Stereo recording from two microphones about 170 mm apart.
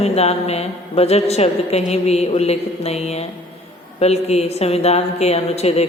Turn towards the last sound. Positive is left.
turn(degrees=40)  # may be behind; listen again after turning